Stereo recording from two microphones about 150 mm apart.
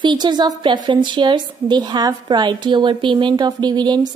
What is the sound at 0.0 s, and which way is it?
A woman's voice, 30° right (ahead or behind).